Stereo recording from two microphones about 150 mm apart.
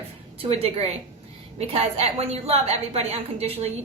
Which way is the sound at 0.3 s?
40° right (ahead or behind).